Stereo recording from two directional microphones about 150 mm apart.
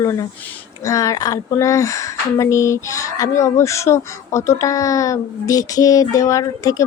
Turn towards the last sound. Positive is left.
turn(degrees=20)  # may be behind; listen again after turning